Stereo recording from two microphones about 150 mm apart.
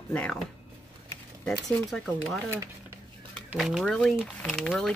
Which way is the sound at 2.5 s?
20° right (ahead or behind).